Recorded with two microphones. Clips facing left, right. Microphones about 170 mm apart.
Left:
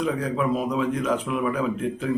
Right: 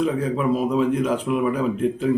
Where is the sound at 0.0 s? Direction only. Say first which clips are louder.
Right 3 dB; centre (ahead or behind).